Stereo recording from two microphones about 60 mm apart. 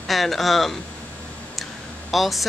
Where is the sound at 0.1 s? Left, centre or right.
Centre.